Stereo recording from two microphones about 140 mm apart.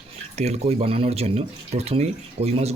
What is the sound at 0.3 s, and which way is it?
Speech, 50° right (ahead or behind).